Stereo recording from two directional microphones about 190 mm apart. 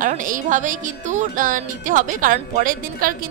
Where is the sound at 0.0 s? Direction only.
45° right (ahead or behind).